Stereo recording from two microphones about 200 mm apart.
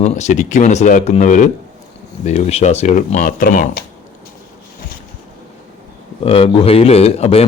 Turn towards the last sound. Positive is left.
turn(degrees=30)  # may be behind; listen again after turning